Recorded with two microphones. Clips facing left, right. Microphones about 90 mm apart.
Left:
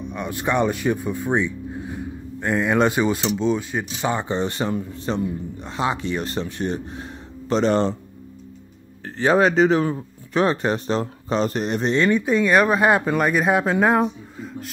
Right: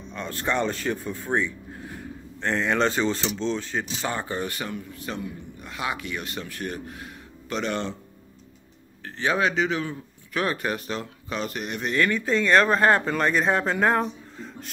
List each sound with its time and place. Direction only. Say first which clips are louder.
0.1 s speech: left 3 dB; 15° left (ahead or behind); by 7.9 s 35° left (ahead or behind)
9.0 s speech: left 7 dB; 35° left (ahead or behind); by 14.7 s 5° left (ahead or behind)